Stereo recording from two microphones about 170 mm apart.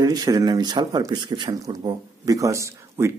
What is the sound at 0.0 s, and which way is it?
Speech, 20° right (ahead or behind).